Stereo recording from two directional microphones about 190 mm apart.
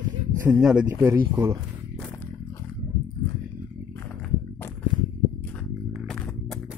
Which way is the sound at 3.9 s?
10° left (ahead or behind).